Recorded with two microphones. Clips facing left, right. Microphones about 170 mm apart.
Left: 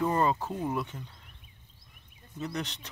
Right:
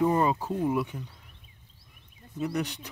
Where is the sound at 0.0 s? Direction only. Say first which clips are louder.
Right 3 dB; 10° right (ahead or behind).